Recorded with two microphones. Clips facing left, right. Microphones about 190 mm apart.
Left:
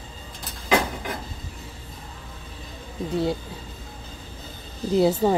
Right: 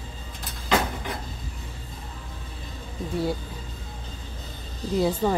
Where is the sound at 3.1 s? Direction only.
25° left (ahead or behind).